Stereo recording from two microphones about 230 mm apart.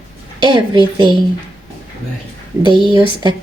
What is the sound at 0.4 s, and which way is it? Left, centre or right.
Speech, centre.